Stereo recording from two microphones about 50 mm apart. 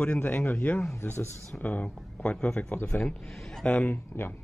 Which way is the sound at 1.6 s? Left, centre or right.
Left.